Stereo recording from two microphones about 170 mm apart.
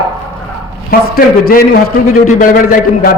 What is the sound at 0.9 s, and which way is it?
Speech, 65° left (ahead or behind).